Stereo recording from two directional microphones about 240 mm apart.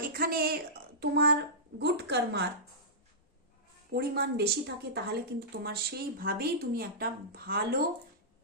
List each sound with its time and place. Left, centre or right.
0.0 s a woman's voice: right
3.9 s speech: right